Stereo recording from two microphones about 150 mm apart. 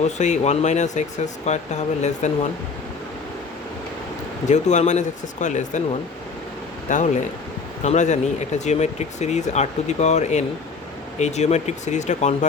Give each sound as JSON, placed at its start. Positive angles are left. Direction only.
{"t": 0.2, "sound": "speech", "side_deg": 50}
{"t": 4.4, "sound": "speech", "side_deg": 50}
{"t": 6.8, "sound": "speech", "side_deg": 55}